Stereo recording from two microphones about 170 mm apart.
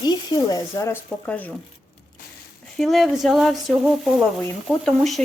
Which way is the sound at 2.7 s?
Centre (ahead or behind).